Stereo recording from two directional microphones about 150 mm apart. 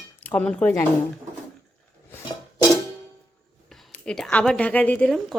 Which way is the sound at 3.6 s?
Centre (ahead or behind).